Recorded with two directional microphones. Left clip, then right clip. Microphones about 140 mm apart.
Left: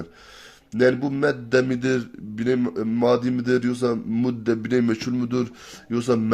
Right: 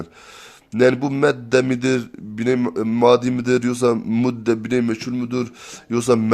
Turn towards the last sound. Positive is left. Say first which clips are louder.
# right 5 dB
turn(degrees=-35)  # may be behind; listen again after turning